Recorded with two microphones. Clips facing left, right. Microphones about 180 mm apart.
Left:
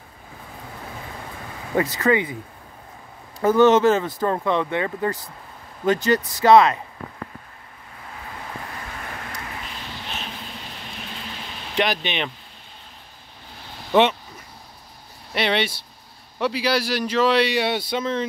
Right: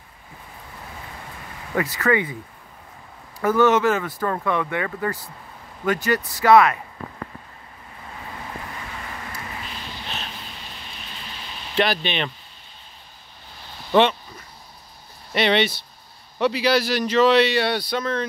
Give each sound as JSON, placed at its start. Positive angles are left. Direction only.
{"t": 1.8, "sound": "speech", "side_deg": 20}
{"t": 3.3, "sound": "speech", "side_deg": 20}
{"t": 11.7, "sound": "speech", "side_deg": 15}
{"t": 15.3, "sound": "a man's voice", "side_deg": 5}